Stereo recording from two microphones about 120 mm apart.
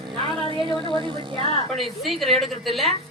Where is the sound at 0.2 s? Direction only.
45° right (ahead or behind).